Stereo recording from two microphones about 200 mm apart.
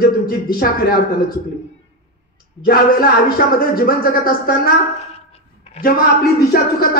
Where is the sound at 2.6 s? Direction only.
50° left (ahead or behind).